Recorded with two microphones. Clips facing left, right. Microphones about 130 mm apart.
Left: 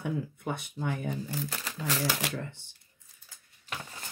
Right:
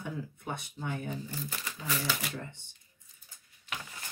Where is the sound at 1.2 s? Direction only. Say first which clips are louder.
Left 4 dB; 90° left.